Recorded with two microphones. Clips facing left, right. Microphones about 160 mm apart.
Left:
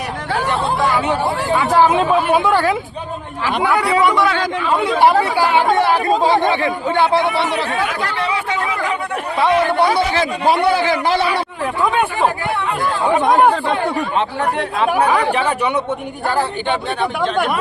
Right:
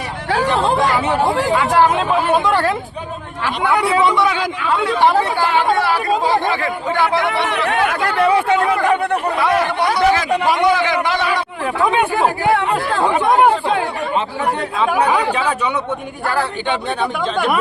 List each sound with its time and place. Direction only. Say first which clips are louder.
0.5 s speech: right 4 dB; 90° right
2.3 s speech: left 1 dB; 5° left (ahead or behind)
4.2 s a man's voice: even; 15° right (ahead or behind)
4.9 s speech: left 2 dB; 10° left (ahead or behind)
5.7 s speech: left 2 dB; 20° left (ahead or behind)
9.7 s a man's voice: even; 30° left (ahead or behind)
16.2 s speech: left 1 dB; 20° left (ahead or behind)